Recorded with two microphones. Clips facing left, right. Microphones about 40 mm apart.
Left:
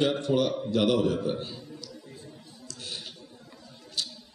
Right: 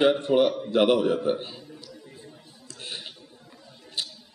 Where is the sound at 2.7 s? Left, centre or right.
Right.